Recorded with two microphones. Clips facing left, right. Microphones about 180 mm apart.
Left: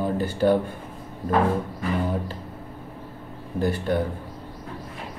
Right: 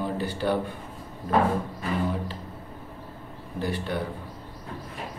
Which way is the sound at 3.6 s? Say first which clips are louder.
Left 6 dB; 45° left (ahead or behind).